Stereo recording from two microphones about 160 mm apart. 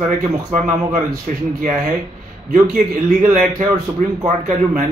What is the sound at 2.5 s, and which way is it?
A man's voice, 50° right (ahead or behind).